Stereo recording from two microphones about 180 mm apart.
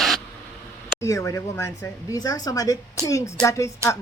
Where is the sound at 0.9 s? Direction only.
15° left (ahead or behind).